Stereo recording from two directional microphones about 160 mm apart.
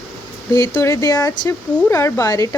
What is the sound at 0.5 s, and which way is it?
Speech, 20° left (ahead or behind).